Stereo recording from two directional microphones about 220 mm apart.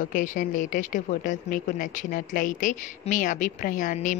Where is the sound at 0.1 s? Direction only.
35° left (ahead or behind).